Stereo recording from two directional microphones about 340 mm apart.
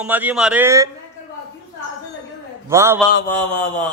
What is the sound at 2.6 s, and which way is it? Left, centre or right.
Speech, centre.